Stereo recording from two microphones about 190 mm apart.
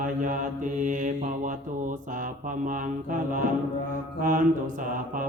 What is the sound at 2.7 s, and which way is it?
Mantra, 45° right (ahead or behind).